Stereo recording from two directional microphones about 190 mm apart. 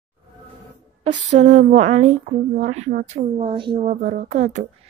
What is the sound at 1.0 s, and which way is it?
Speech, 40° right (ahead or behind).